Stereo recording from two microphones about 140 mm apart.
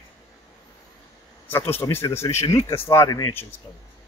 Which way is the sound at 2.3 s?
45° left (ahead or behind).